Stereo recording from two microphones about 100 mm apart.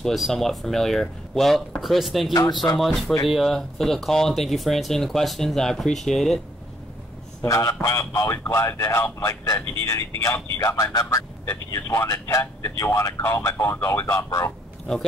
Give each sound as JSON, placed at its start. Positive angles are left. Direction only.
{"t": 0.0, "sound": "speech", "side_deg": 0}
{"t": 7.4, "sound": "speech", "side_deg": 30}